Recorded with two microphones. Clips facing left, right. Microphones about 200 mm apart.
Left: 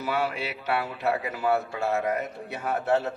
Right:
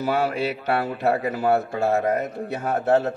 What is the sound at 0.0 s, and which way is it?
Speech, 45° right (ahead or behind).